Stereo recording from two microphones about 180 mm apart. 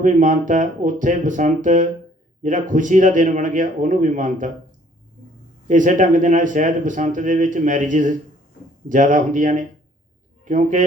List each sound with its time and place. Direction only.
0.0 s speech: 45° right (ahead or behind)
5.6 s speech: 45° right (ahead or behind)